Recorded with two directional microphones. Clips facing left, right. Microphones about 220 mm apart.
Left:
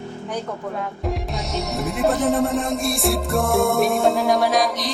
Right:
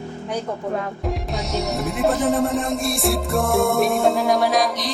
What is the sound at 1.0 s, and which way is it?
A woman's voice, centre (ahead or behind).